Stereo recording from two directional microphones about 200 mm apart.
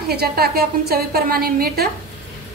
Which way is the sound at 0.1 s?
50° right (ahead or behind).